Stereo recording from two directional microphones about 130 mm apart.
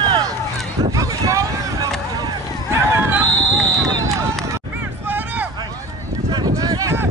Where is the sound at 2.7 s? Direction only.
20° right (ahead or behind).